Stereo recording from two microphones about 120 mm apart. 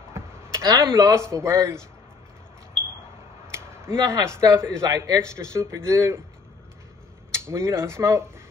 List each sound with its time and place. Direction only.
0.1 s a sound: 25° right (ahead or behind)
0.8 s a man's voice: 25° right (ahead or behind)
3.4 s a man's voice: 20° right (ahead or behind)
7.4 s a man's voice: 25° right (ahead or behind)